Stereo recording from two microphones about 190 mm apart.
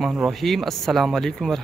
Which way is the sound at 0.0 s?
Centre (ahead or behind).